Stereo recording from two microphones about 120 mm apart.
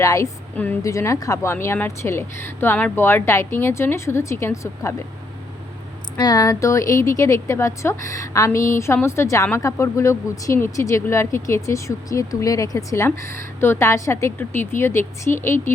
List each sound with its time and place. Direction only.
0.0 s speech: 25° left (ahead or behind)
0.5 s a woman's voice: 15° left (ahead or behind)
0.8 s speech: 25° left (ahead or behind)
6.1 s speech: 35° left (ahead or behind)